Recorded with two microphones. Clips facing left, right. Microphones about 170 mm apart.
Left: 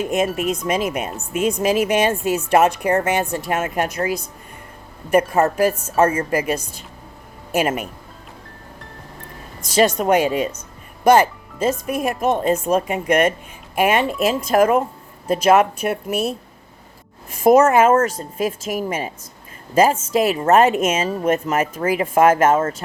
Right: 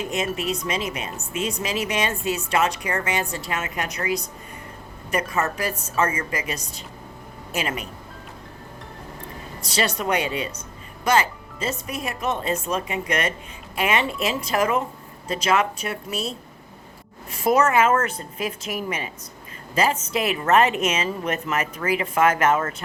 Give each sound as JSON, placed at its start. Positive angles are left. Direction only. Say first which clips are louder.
{"t": 0.0, "sound": "speech", "louder": "left 6 dB", "side_deg": 50}
{"t": 9.6, "sound": "speech", "louder": "left 8 dB", "side_deg": 50}
{"t": 17.3, "sound": "speech", "louder": "left 6 dB", "side_deg": 45}